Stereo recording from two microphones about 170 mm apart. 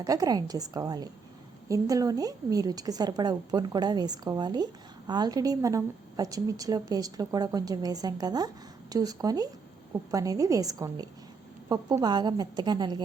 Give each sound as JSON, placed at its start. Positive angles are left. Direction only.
{"t": 0.0, "sound": "a woman's voice", "side_deg": -20}